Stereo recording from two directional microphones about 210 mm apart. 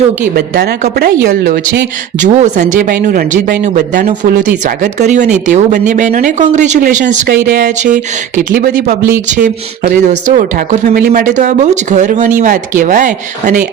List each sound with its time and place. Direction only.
0.3 s a woman's voice: 45° right (ahead or behind)